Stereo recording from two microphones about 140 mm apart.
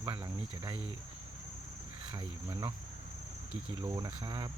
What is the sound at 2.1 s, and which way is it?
Speech, 25° right (ahead or behind).